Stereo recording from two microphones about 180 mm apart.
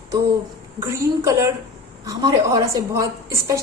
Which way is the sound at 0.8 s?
15° right (ahead or behind).